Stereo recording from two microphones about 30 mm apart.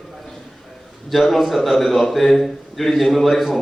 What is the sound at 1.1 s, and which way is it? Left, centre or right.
Speech, centre.